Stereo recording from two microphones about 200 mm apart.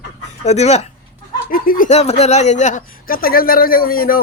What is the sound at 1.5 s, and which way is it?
Speech, 45° left (ahead or behind).